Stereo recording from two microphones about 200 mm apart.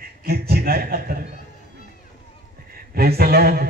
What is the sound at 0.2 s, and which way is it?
Speech, 50° right (ahead or behind).